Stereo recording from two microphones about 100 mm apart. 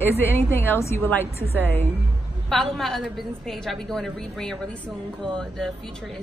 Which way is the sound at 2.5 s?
5° left (ahead or behind).